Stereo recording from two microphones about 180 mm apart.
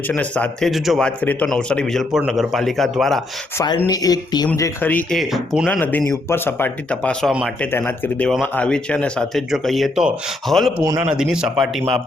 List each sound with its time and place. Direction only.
0.1 s a man's voice: 5° left (ahead or behind)
3.8 s speech: 20° left (ahead or behind)
5.2 s a man's voice: centre (ahead or behind)
5.8 s speech: 10° left (ahead or behind)
7.7 s a man's voice: 10° left (ahead or behind)